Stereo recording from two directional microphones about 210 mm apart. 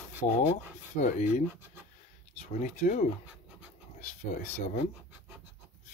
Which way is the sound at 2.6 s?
35° left (ahead or behind).